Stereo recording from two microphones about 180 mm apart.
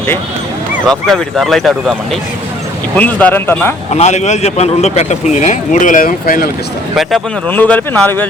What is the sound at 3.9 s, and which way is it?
Speech, 40° left (ahead or behind).